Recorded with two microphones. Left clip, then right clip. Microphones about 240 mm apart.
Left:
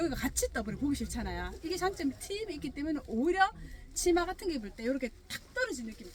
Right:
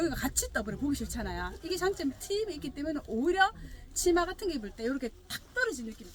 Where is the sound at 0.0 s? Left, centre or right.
Centre.